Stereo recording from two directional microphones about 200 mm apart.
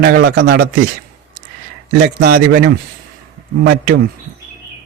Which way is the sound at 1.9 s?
50° right (ahead or behind).